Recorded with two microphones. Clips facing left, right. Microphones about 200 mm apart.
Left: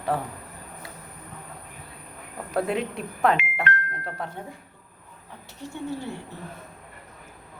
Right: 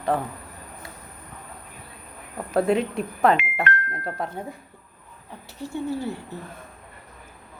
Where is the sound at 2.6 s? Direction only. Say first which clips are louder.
Right 5 dB; centre (ahead or behind).